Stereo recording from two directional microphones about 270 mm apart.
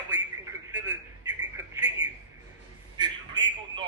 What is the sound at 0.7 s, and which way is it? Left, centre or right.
Telephone, centre.